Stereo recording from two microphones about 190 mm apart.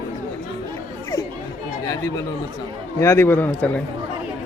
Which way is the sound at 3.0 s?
15° left (ahead or behind).